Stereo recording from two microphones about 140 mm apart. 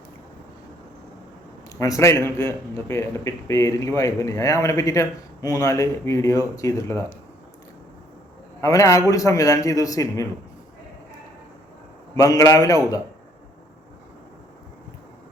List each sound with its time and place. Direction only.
1.7 s a man's voice: 20° left (ahead or behind)
8.6 s a man's voice: 25° left (ahead or behind)
12.1 s a man's voice: 25° left (ahead or behind)